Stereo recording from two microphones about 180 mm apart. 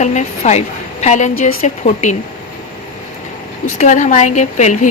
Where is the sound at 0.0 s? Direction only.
40° left (ahead or behind).